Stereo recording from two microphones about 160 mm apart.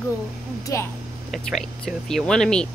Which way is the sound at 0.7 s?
20° left (ahead or behind).